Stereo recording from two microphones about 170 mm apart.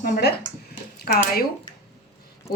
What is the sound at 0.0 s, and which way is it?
Speech, 70° left (ahead or behind).